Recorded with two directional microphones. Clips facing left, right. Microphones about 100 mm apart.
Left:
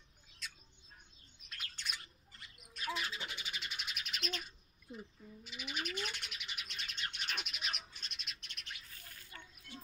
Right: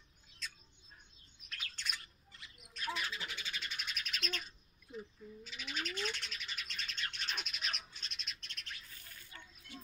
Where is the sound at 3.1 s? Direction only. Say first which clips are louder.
Even; 25° left (ahead or behind).